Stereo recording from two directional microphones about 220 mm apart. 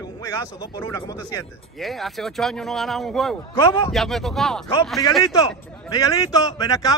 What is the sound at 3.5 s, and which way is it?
Speech, 20° left (ahead or behind).